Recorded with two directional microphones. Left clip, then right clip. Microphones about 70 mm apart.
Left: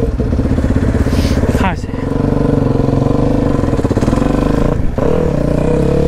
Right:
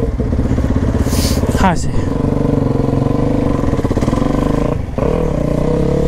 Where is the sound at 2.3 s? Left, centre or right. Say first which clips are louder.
Left 2 dB; left.